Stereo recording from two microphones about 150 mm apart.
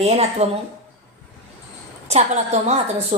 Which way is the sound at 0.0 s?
45° right (ahead or behind).